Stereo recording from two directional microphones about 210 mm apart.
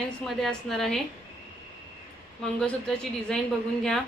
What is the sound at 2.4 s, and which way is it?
A woman's voice, 5° left (ahead or behind).